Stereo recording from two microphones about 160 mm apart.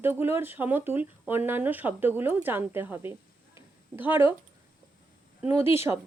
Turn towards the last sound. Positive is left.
turn(degrees=-15)  # may be behind; listen again after turning